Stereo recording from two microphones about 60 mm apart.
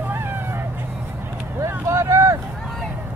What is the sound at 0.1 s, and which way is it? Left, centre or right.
Vehicle, right.